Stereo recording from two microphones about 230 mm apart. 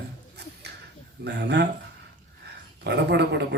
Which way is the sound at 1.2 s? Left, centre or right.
Right.